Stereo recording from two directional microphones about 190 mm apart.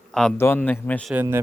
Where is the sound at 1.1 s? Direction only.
10° right (ahead or behind).